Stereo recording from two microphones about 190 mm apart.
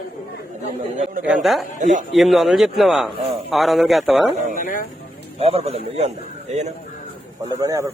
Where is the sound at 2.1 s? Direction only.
Centre (ahead or behind).